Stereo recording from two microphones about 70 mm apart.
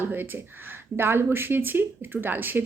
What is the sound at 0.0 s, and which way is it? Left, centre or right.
Speech, right.